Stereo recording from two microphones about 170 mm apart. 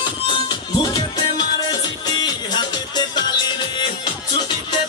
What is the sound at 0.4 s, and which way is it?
Music, 25° left (ahead or behind).